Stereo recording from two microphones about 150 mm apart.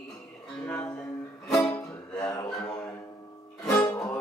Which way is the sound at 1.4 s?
Centre (ahead or behind).